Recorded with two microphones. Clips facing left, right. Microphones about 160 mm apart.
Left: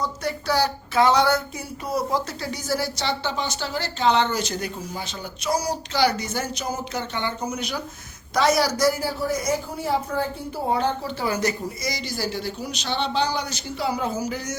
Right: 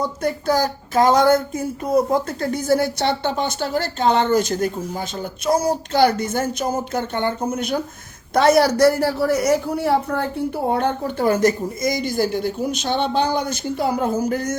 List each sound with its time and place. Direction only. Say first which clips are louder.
0.0 s a woman's voice: right 5 dB; 50° right (ahead or behind)